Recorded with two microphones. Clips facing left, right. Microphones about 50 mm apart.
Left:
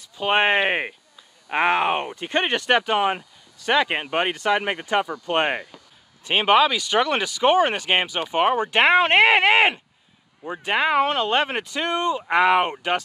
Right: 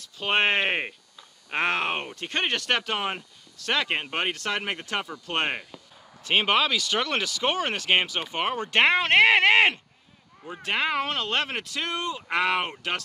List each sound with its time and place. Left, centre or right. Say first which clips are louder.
0.0 s speech: left 4 dB; centre